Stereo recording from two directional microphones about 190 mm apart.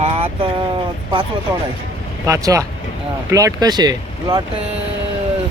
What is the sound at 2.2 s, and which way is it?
Speech, 15° right (ahead or behind).